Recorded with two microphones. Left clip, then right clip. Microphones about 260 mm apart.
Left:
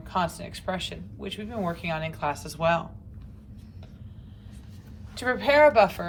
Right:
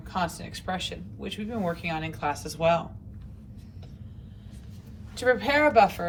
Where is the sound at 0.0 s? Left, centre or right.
Left.